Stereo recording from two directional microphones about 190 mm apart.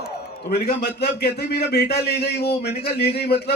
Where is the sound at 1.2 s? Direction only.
60° left (ahead or behind).